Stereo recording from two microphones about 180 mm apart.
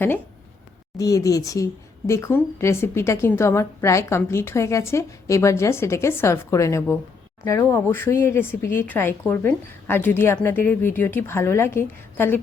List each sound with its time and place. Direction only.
0.9 s speech: 20° left (ahead or behind)